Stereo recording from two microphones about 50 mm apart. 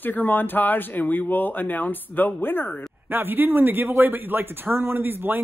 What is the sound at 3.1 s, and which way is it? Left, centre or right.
A man's voice, right.